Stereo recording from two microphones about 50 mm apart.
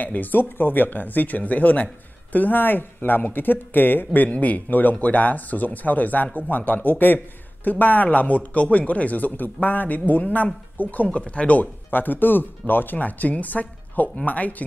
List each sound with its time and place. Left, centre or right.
0.0 s speech: left